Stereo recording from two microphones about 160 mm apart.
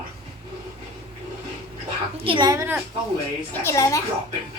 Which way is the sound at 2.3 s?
25° right (ahead or behind).